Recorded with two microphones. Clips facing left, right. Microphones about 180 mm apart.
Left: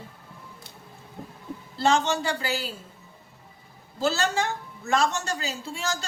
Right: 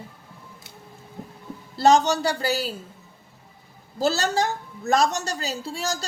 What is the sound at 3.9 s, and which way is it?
A woman's voice, 40° right (ahead or behind).